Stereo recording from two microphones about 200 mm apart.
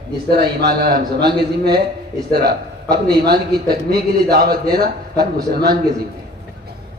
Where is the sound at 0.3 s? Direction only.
50° right (ahead or behind).